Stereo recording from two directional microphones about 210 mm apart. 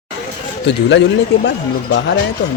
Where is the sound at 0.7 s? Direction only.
55° left (ahead or behind).